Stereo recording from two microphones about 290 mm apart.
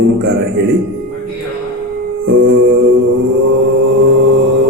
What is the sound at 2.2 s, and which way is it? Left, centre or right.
Music, right.